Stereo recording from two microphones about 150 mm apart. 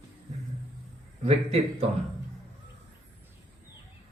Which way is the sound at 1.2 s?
45° right (ahead or behind).